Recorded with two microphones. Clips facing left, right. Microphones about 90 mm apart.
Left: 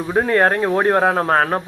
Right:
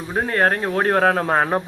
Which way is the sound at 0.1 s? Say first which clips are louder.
Left 3 dB; 35° left (ahead or behind).